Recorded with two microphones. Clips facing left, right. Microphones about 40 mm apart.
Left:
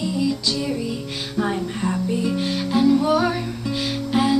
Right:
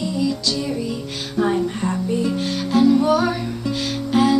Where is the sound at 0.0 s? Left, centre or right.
Centre.